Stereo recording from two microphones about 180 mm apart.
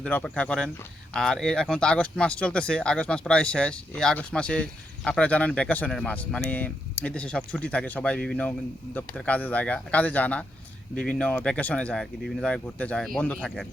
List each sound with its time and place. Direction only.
0.0 s speech: 5° left (ahead or behind)